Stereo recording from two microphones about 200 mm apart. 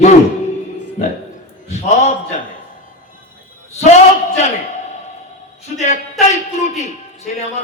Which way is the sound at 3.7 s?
35° left (ahead or behind).